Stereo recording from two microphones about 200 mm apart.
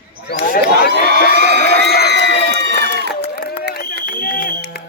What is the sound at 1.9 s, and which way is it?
Crowd, 55° left (ahead or behind).